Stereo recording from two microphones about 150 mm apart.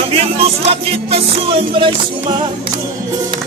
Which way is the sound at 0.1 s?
40° right (ahead or behind).